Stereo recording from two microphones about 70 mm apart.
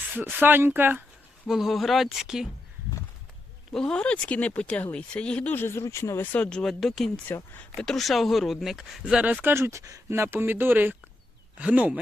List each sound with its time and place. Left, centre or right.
0.1 s speech: right
1.5 s speech: centre
3.7 s speech: centre; by 6.2 s left
6.3 s speech: centre
7.3 s speech: left
7.8 s speech: centre
9.1 s speech: centre
9.4 s speech: right
9.8 s speech: right
10.2 s speech: right